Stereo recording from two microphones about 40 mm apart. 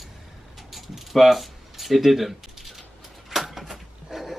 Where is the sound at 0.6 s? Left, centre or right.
Centre.